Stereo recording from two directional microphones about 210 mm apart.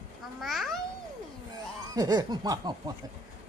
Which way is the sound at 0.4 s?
Centre (ahead or behind).